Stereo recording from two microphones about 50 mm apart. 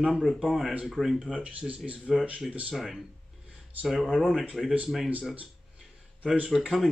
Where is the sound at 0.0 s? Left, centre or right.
Centre.